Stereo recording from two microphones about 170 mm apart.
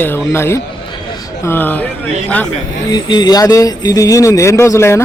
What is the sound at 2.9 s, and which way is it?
Speech, 25° left (ahead or behind).